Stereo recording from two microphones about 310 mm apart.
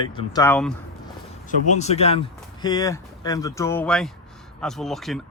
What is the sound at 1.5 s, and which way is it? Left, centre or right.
Speech, left.